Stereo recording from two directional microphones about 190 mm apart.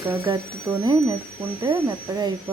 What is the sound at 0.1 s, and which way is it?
Speech, 10° right (ahead or behind).